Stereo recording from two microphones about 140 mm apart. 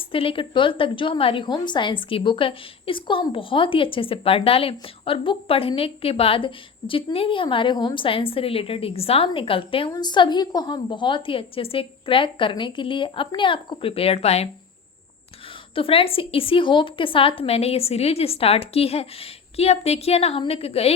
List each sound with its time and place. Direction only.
0.1 s a woman's voice: 40° left (ahead or behind)
15.7 s a woman's voice: 40° left (ahead or behind)